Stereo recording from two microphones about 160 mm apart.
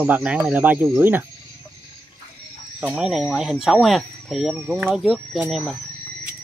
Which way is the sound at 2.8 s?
5° right (ahead or behind).